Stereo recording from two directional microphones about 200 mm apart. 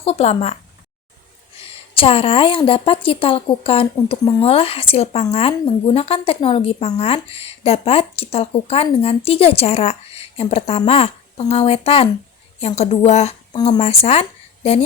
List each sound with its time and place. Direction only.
0.0 s a woman's voice: 30° left (ahead or behind)